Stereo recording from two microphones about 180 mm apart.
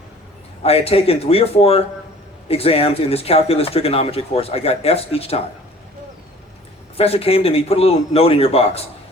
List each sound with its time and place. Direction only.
0.6 s speech: 35° left (ahead or behind)
6.9 s speech: 35° left (ahead or behind)